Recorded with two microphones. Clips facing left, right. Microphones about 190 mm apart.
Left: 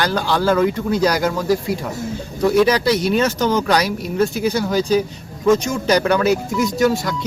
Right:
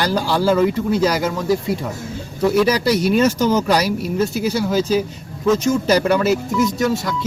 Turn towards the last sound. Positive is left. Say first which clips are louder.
# left 1 dB
turn(degrees=0)  # may be behind; listen again after turning